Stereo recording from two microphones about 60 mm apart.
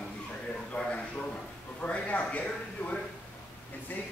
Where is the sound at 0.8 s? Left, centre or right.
Left.